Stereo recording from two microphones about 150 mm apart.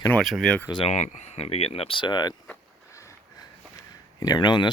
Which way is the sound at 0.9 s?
50° left (ahead or behind).